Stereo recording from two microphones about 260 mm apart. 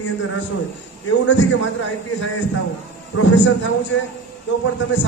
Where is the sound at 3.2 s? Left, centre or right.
Left.